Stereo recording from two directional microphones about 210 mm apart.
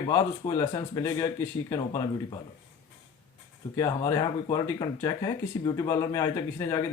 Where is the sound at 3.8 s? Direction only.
15° left (ahead or behind).